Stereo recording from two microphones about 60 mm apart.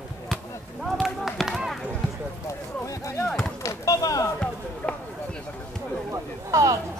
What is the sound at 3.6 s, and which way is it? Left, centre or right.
Chop, left.